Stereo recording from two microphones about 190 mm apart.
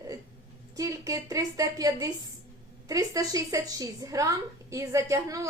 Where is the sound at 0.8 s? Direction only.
15° right (ahead or behind).